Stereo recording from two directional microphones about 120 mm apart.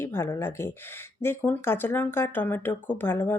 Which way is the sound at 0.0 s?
20° left (ahead or behind).